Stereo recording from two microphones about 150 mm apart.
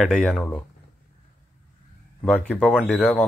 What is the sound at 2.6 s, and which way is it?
Speech, 5° left (ahead or behind).